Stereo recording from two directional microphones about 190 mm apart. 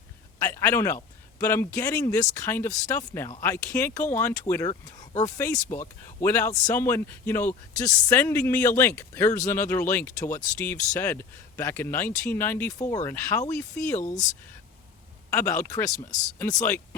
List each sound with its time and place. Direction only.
0.3 s speech: 15° left (ahead or behind)
15.3 s speech: 10° left (ahead or behind)